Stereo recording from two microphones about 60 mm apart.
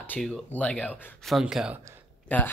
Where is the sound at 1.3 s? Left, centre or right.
Centre.